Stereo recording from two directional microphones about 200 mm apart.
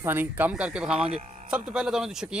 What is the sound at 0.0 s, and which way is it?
Speech, 10° right (ahead or behind).